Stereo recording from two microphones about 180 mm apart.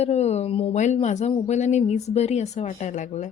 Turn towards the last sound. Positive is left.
turn(degrees=40)  # may be behind; listen again after turning